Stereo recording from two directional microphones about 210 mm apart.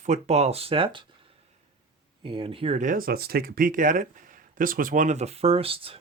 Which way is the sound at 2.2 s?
25° right (ahead or behind).